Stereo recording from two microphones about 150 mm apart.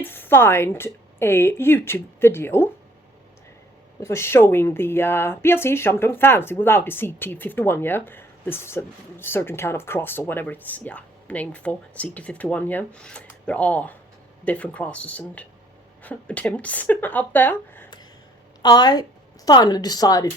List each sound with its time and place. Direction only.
0.0 s speech: 15° left (ahead or behind)
4.0 s speech: 15° left (ahead or behind)
18.6 s speech: 30° left (ahead or behind)